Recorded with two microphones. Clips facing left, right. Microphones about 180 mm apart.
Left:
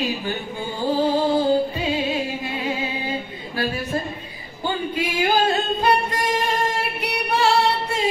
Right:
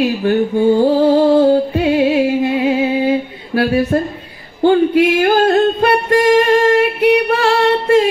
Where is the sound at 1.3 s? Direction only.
65° right (ahead or behind); by 7.4 s 90° right.